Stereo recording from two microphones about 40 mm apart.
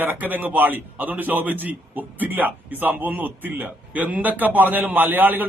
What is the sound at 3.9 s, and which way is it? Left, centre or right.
A man's voice, right.